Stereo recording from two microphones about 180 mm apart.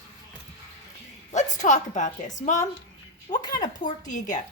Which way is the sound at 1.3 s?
40° left (ahead or behind).